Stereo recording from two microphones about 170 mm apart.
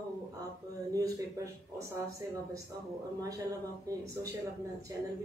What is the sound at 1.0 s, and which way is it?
Speech, 20° right (ahead or behind).